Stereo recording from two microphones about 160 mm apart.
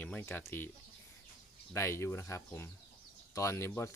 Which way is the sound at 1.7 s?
15° left (ahead or behind).